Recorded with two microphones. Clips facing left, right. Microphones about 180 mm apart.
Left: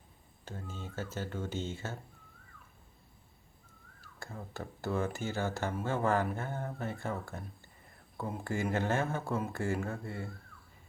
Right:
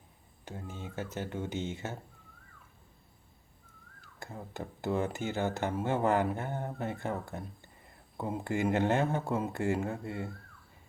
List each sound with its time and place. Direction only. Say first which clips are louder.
0.4 s speech: right 2 dB; 15° right (ahead or behind)
4.2 s speech: right 2 dB; 20° right (ahead or behind)